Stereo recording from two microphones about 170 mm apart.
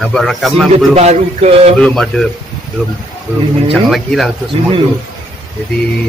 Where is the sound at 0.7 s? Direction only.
40° right (ahead or behind).